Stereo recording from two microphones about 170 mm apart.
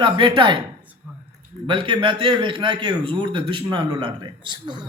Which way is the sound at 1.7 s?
30° right (ahead or behind).